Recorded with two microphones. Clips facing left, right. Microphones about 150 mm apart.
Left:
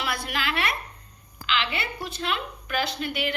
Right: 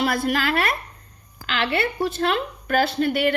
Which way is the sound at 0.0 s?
45° right (ahead or behind).